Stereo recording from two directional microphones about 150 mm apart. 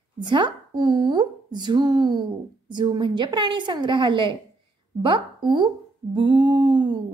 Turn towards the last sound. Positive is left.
turn(degrees=-30)  # may be behind; listen again after turning